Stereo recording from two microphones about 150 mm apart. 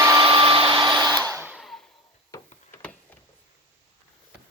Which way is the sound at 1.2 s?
20° right (ahead or behind).